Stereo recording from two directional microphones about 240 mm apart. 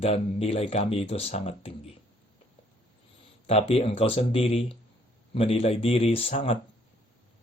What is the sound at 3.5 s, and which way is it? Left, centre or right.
Speech, left.